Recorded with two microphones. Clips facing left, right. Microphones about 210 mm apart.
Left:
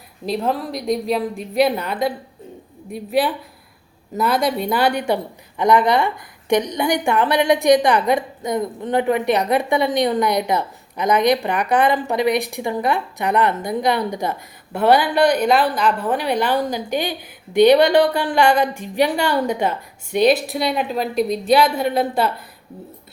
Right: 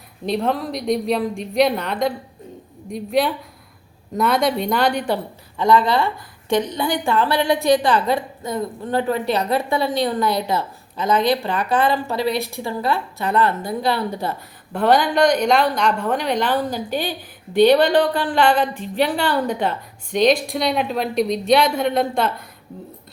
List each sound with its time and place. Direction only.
0.3 s a woman's voice: centre (ahead or behind)